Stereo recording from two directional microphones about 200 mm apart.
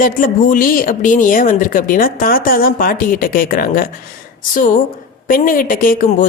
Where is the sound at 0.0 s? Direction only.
40° left (ahead or behind).